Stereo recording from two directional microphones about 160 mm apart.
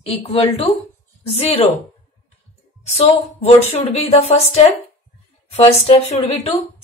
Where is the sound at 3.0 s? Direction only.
40° left (ahead or behind).